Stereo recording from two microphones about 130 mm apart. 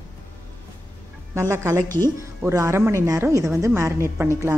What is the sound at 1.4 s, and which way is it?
Speech, 20° right (ahead or behind).